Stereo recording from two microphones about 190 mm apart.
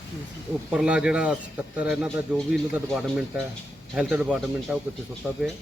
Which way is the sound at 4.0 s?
5° right (ahead or behind).